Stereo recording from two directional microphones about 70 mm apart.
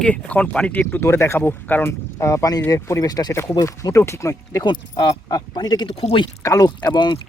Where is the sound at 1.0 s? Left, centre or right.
Left.